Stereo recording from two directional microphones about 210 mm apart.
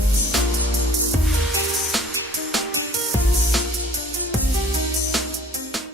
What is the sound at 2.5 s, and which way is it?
Music, centre (ahead or behind).